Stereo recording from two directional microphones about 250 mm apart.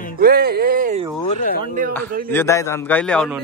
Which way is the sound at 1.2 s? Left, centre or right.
Left.